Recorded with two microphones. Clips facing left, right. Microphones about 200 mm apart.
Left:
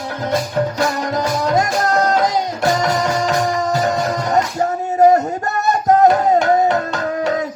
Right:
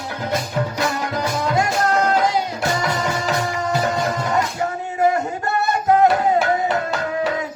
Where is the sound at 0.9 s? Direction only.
40° left (ahead or behind).